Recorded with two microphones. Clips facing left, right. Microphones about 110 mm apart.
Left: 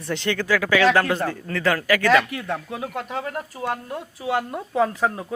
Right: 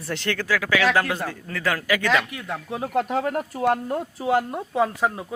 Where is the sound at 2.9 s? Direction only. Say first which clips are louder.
Right 9 dB; 50° right (ahead or behind).